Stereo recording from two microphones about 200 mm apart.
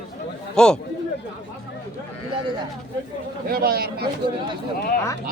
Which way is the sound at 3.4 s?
50° right (ahead or behind).